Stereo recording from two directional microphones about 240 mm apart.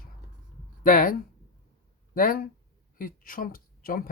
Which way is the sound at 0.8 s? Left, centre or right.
Left.